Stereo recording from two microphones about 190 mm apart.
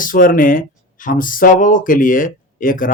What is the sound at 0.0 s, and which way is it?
Speech, 45° left (ahead or behind).